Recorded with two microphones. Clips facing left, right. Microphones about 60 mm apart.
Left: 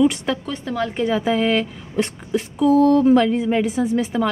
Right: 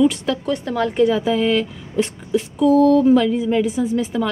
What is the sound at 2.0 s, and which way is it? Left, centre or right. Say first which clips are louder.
A woman's voice: right 2 dB; centre.